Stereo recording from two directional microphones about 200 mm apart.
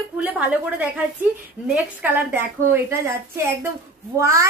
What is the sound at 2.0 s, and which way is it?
Speech, 10° right (ahead or behind).